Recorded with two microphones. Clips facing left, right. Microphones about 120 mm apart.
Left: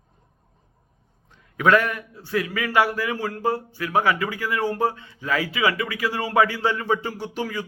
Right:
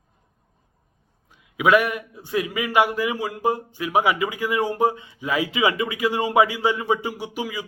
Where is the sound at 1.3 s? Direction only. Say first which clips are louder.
Right 1 dB; 10° right (ahead or behind).